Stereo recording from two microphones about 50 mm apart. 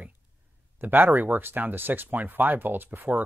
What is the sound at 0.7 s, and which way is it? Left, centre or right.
Speech, right.